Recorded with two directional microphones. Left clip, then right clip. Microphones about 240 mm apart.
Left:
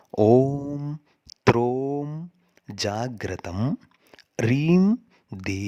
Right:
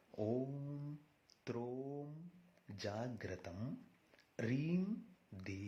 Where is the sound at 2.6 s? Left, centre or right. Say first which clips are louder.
Left 17 dB; left.